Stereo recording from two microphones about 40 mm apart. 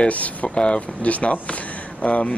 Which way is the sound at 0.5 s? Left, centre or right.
Left.